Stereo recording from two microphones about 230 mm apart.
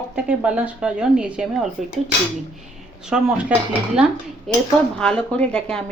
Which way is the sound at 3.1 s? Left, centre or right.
Centre.